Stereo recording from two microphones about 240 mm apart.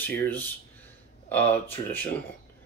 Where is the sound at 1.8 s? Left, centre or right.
Centre.